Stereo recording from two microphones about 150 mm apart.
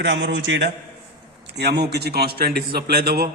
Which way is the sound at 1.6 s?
90° right.